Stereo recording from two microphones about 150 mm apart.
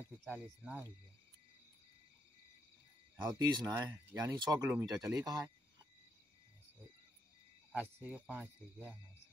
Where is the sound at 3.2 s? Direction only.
30° right (ahead or behind).